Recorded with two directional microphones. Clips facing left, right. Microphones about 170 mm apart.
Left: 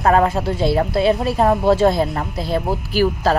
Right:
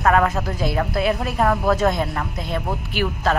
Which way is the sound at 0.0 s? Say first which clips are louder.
Left 3 dB; 30° left (ahead or behind).